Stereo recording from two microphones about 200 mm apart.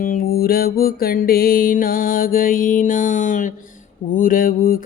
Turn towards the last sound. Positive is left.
turn(degrees=45)  # may be behind; listen again after turning